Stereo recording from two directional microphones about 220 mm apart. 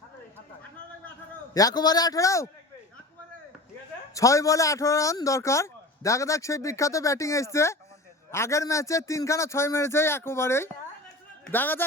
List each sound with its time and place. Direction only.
1.5 s a man's voice: 15° left (ahead or behind)
4.1 s a man's voice: 15° left (ahead or behind)